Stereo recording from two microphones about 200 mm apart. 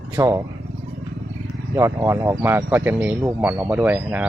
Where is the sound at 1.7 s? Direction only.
15° right (ahead or behind).